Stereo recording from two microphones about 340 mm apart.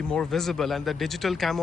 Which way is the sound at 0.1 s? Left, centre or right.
Centre.